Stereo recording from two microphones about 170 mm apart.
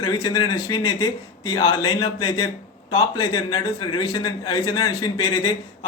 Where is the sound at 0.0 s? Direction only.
25° left (ahead or behind).